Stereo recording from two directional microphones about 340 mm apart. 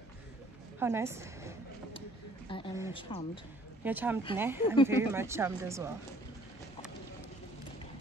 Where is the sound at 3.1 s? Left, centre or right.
Centre.